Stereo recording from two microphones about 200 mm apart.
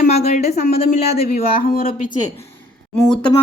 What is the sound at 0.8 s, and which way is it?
Speech, 30° left (ahead or behind).